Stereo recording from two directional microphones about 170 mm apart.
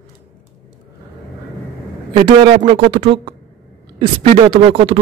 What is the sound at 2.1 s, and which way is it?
A man's voice, 30° right (ahead or behind).